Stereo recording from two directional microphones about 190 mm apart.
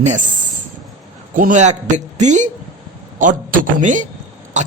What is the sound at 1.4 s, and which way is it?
Speech, 40° right (ahead or behind).